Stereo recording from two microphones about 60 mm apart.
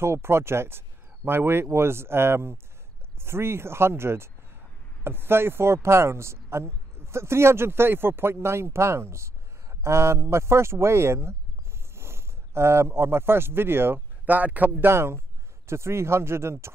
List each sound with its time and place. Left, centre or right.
0.0 s speech: right
14.2 s a man's voice: right
14.9 s speech: right